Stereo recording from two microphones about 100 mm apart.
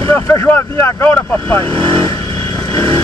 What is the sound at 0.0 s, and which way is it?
Speech, 30° left (ahead or behind).